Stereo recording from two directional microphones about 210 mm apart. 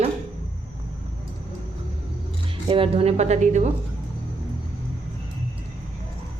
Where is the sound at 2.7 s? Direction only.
25° right (ahead or behind).